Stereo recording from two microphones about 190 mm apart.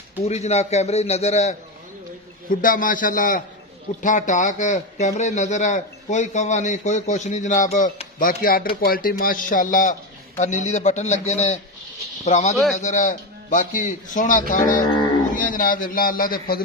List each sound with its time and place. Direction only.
0.2 s a man's voice: 35° left (ahead or behind)
2.5 s a man's voice: 45° left (ahead or behind)